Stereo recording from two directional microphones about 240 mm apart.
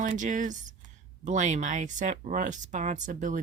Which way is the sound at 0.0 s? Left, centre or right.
Right.